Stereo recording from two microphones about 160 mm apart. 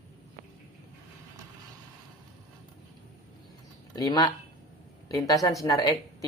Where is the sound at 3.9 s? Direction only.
25° left (ahead or behind).